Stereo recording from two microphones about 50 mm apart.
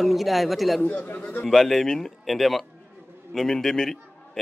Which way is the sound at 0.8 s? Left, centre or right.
Left.